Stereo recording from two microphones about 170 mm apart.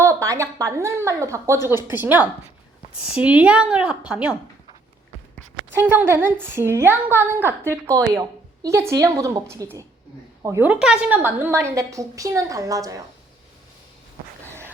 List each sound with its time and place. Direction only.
0.0 s a woman's voice: 20° right (ahead or behind)
5.7 s a woman's voice: 10° right (ahead or behind)